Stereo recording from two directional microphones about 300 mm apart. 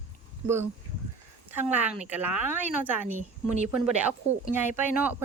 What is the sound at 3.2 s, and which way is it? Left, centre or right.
Speech, right.